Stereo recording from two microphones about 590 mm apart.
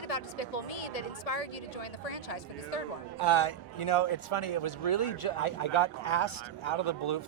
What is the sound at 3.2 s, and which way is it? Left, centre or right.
Speech, left.